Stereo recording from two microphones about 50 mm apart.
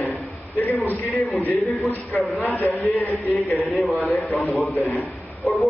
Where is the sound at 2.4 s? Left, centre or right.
Left.